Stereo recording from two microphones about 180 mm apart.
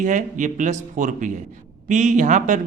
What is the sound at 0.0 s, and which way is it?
A man's voice, 45° right (ahead or behind).